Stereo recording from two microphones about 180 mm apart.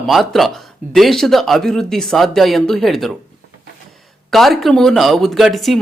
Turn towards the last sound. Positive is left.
turn(degrees=0)  # may be behind; listen again after turning